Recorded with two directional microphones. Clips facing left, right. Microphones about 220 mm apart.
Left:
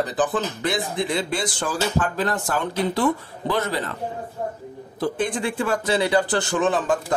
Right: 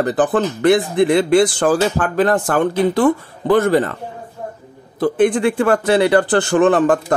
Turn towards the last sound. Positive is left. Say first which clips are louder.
# right 8 dB
turn(degrees=-60)  # may be behind; listen again after turning